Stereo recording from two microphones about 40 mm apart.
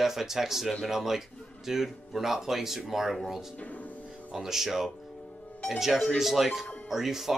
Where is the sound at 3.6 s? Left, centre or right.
Left.